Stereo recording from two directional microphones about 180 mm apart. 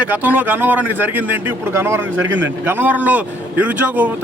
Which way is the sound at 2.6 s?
10° right (ahead or behind).